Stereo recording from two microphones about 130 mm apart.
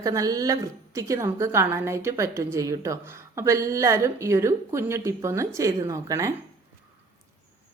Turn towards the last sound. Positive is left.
turn(degrees=-25)  # may be behind; listen again after turning